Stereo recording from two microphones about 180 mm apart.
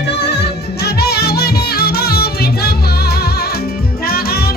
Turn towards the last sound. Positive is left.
turn(degrees=60)  # may be behind; listen again after turning